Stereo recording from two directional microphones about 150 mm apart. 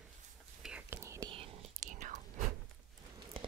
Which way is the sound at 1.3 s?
35° right (ahead or behind).